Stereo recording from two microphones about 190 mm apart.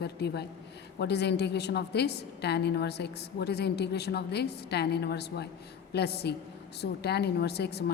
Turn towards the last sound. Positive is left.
turn(degrees=60)  # may be behind; listen again after turning